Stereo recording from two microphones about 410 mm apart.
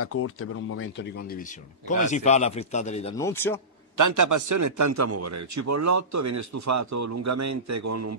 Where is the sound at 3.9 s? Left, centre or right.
Right.